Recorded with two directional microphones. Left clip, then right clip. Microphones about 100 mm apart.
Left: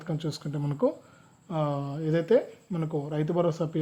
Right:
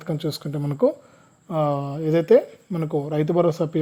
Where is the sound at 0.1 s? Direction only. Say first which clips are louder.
Right 7 dB; 60° right (ahead or behind).